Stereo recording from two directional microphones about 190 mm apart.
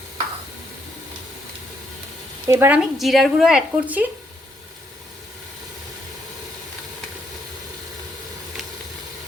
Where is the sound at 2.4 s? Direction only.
15° right (ahead or behind).